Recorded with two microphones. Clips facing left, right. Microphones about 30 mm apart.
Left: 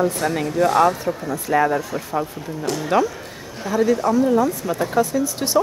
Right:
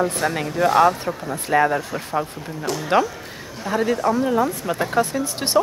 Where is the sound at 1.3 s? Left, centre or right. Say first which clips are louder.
Even; right.